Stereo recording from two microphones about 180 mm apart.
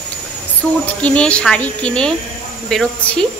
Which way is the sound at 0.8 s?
5° left (ahead or behind).